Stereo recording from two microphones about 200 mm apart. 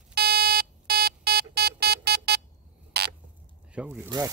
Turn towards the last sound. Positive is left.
turn(degrees=-15)  # may be behind; listen again after turning